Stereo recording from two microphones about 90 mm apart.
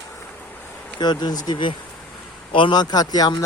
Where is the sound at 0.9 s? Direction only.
55° left (ahead or behind).